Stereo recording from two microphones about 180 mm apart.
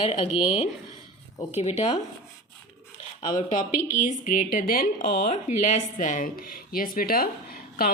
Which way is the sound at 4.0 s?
50° left (ahead or behind).